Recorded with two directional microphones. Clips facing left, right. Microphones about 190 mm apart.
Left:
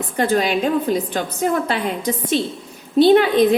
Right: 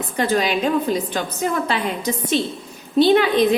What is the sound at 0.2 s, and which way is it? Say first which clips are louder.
A woman's voice: left 2 dB; 50° left (ahead or behind).